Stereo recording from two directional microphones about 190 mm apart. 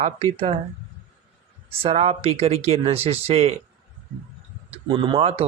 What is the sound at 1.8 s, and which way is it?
Speech, 35° right (ahead or behind).